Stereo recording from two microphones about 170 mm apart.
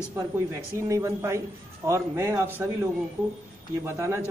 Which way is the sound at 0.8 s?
15° right (ahead or behind).